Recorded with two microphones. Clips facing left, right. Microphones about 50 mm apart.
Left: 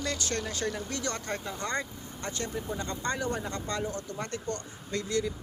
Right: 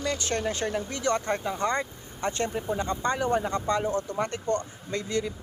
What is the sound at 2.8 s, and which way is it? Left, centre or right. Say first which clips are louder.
Speech: right 5 dB; right.